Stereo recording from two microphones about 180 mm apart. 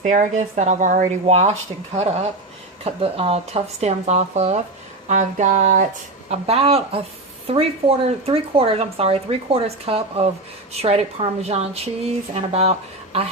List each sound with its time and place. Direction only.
0.0 s speech: 45° right (ahead or behind)